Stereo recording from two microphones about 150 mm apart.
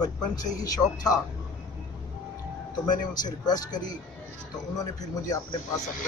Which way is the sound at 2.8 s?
25° left (ahead or behind).